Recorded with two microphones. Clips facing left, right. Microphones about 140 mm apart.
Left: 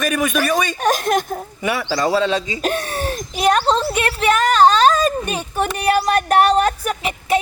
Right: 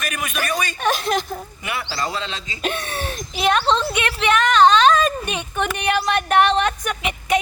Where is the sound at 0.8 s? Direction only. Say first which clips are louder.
Left 3 dB; 45° left (ahead or behind).